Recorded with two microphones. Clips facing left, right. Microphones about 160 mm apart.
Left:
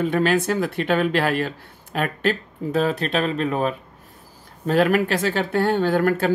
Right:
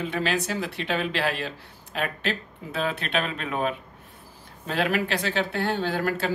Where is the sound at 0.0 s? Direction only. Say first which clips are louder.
Left 7 dB; 50° left (ahead or behind).